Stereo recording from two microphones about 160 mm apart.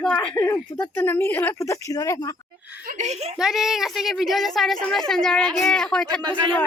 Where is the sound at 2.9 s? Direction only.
45° right (ahead or behind).